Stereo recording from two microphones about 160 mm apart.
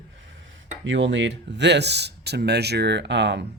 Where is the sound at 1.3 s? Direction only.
90° right.